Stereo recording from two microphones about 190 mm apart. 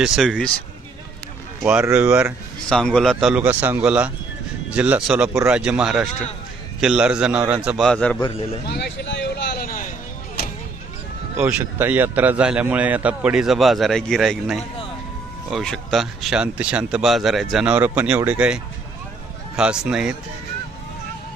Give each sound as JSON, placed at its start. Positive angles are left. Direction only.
{"t": 0.0, "sound": "speech", "side_deg": 0}
{"t": 1.8, "sound": "a man's voice", "side_deg": -10}
{"t": 2.6, "sound": "speech", "side_deg": 5}
{"t": 8.6, "sound": "a sound", "side_deg": 60}
{"t": 11.3, "sound": "a man's voice", "side_deg": -10}